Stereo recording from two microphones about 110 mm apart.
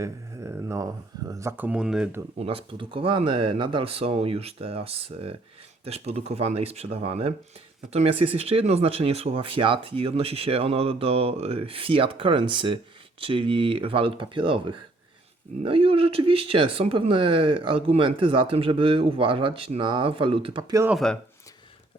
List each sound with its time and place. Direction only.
0.0 s speech: 30° right (ahead or behind); by 2.0 s 5° right (ahead or behind)
2.4 s speech: 55° right (ahead or behind); by 20.8 s 40° right (ahead or behind)
20.9 s speech: 5° left (ahead or behind)